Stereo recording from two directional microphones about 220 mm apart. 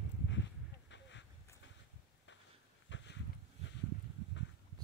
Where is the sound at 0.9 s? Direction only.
55° left (ahead or behind).